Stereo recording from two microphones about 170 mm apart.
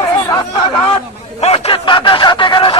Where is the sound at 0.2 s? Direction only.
30° left (ahead or behind).